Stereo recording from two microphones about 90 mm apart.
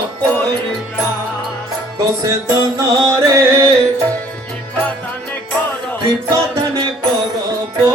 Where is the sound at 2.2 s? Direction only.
35° right (ahead or behind).